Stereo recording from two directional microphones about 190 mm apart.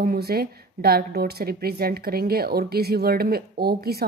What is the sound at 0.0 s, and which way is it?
A woman's voice, 50° right (ahead or behind).